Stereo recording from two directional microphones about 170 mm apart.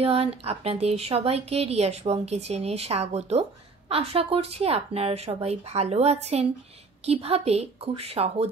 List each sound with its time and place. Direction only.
0.0 s a woman's voice: 35° right (ahead or behind)